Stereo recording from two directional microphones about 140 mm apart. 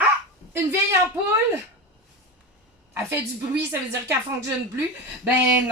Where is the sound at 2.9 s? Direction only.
20° right (ahead or behind).